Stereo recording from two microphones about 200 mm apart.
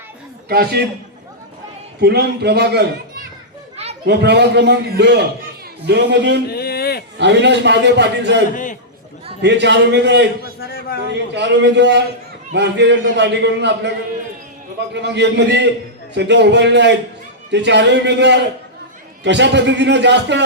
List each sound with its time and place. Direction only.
0.4 s a man's voice: 50° right (ahead or behind)
2.0 s a man's voice: 55° right (ahead or behind)
4.0 s a man's voice: 60° right (ahead or behind)
6.5 s a sound: 50° left (ahead or behind)
7.2 s a man's voice: 60° right (ahead or behind)
8.5 s a sound: 40° left (ahead or behind)
9.4 s a man's voice: 60° right (ahead or behind)
14.9 s a man's voice: 60° right (ahead or behind)